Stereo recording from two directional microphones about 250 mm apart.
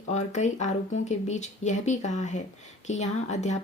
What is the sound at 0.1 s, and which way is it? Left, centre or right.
Speech, left.